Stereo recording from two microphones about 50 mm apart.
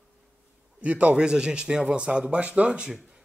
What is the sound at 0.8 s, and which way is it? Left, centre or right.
Speech, right.